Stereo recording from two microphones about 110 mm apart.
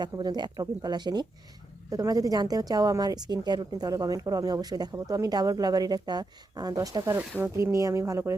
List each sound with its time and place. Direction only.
0.0 s a woman's voice: 40° right (ahead or behind)
7.2 s speech: 20° right (ahead or behind)